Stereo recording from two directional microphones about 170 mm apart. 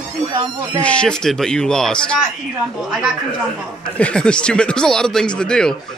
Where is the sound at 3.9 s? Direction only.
5° left (ahead or behind).